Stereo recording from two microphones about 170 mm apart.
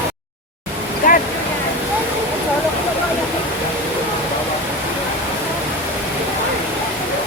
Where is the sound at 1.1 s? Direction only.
50° left (ahead or behind).